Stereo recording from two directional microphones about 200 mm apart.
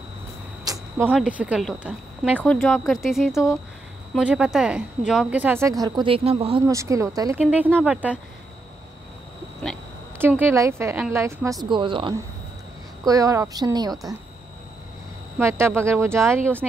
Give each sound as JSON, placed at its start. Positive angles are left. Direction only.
{"t": 0.7, "sound": "speech", "side_deg": -10}
{"t": 2.4, "sound": "speech", "side_deg": 5}
{"t": 6.7, "sound": "speech", "side_deg": -15}
{"t": 10.1, "sound": "speech", "side_deg": -10}
{"t": 11.7, "sound": "speech", "side_deg": -25}
{"t": 15.3, "sound": "speech", "side_deg": -15}